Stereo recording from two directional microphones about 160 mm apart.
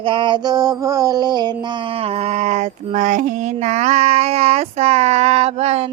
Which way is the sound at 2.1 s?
40° right (ahead or behind).